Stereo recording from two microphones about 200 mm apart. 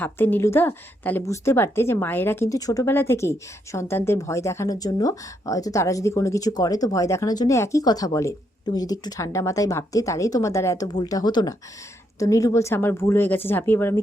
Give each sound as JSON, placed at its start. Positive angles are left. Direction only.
{"t": 0.0, "sound": "a woman's voice", "side_deg": 10}